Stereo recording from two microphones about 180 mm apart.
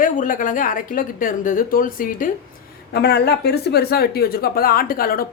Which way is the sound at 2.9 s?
65° left (ahead or behind).